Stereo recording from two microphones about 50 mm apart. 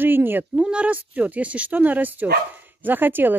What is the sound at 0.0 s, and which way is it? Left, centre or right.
Speech, right.